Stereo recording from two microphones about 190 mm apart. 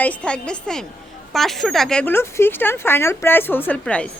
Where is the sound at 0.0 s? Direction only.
5° left (ahead or behind).